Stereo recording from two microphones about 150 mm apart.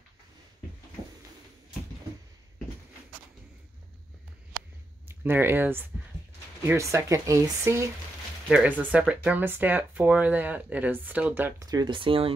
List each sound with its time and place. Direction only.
4.6 s a sound: 15° right (ahead or behind)
6.6 s speech: 20° right (ahead or behind)
8.5 s speech: 10° right (ahead or behind)
11.6 s speech: 25° right (ahead or behind)